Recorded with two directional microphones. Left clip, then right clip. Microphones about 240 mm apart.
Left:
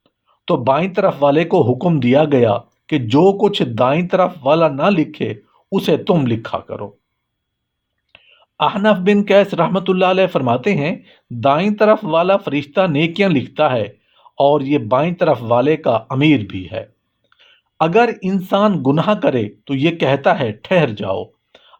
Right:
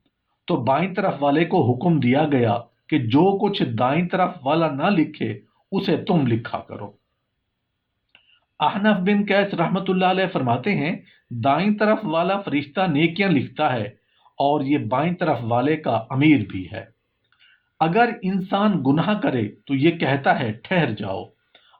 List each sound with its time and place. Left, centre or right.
0.4 s speech: left
8.1 s speech: left